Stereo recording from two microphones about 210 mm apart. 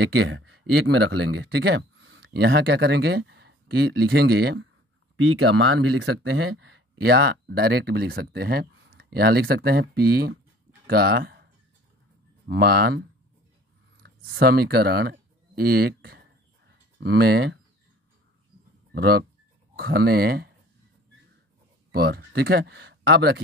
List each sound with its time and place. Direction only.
0.0 s speech: 60° right (ahead or behind)
5.1 s speech: 70° right (ahead or behind)
7.0 s speech: 50° right (ahead or behind)
12.4 s speech: 50° right (ahead or behind)
14.0 s speech: 50° right (ahead or behind)
16.0 s a sound: 50° right (ahead or behind)
18.9 s speech: 50° right (ahead or behind)
21.9 s speech: 50° right (ahead or behind)